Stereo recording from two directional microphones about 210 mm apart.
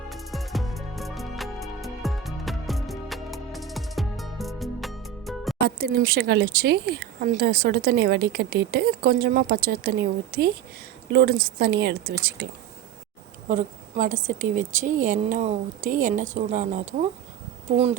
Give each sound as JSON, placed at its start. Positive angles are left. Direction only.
{"t": 0.1, "sound": "music", "side_deg": 0}
{"t": 5.6, "sound": "a woman's voice", "side_deg": -50}